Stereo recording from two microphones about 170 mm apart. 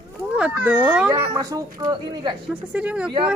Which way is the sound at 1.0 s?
20° right (ahead or behind).